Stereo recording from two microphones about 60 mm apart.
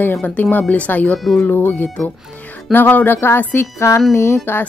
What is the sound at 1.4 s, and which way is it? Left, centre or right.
Speech, left.